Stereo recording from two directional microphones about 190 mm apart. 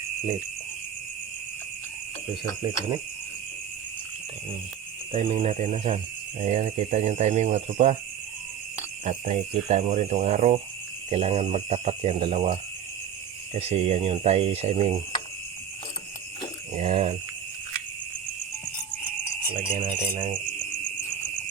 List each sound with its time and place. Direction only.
5.1 s speech: 35° right (ahead or behind)
9.0 s speech: 35° right (ahead or behind)
16.7 s speech: 35° right (ahead or behind)
19.8 s speech: 30° right (ahead or behind)